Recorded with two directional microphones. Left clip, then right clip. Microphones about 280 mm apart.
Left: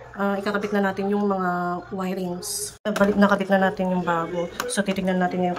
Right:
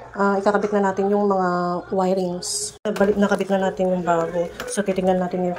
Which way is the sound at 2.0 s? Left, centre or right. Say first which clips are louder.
Right 7 dB; centre.